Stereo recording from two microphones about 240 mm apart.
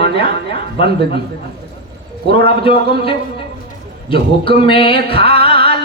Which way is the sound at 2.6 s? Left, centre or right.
Left.